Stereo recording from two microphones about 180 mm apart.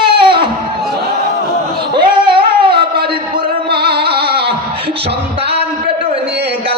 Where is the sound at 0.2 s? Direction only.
30° right (ahead or behind).